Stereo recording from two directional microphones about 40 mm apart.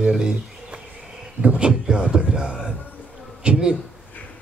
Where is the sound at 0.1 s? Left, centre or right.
Centre.